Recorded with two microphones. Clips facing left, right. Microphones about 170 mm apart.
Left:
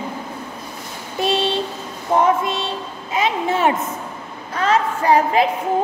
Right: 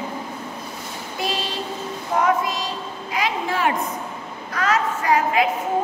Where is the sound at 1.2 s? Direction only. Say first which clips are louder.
Left 7 dB; 25° left (ahead or behind).